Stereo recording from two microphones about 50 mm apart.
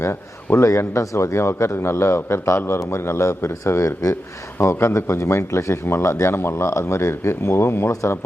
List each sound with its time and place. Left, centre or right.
0.0 s a man's voice: left
4.1 s a man's voice: left